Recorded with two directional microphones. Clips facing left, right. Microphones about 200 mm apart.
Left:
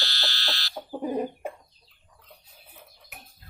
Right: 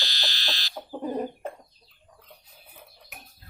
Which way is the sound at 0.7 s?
10° left (ahead or behind).